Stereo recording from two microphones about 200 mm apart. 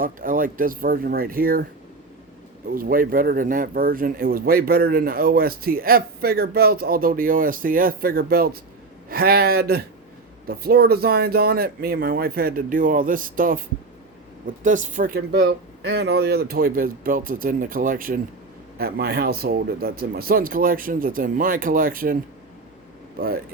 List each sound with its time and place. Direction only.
0.0 s speech: 45° right (ahead or behind)
2.7 s speech: 45° right (ahead or behind)
14.6 s speech: 40° right (ahead or behind)